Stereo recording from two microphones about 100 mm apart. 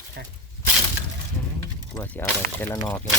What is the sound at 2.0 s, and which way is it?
Speech, 20° left (ahead or behind).